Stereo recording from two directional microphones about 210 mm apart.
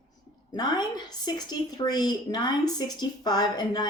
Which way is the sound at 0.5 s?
20° left (ahead or behind).